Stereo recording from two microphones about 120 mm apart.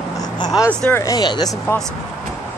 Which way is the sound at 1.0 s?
30° left (ahead or behind).